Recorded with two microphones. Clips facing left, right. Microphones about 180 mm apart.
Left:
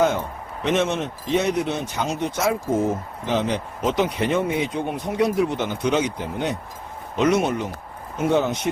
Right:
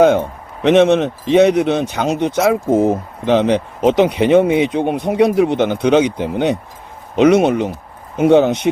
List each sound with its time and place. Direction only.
0.6 s speech: 75° right (ahead or behind)